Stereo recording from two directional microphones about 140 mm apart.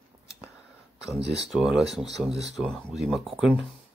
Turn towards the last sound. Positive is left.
turn(degrees=0)  # may be behind; listen again after turning